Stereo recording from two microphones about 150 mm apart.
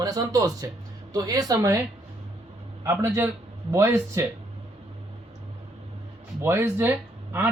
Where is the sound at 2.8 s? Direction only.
15° right (ahead or behind).